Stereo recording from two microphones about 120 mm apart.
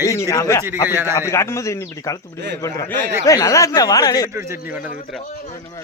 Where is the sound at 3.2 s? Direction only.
25° left (ahead or behind).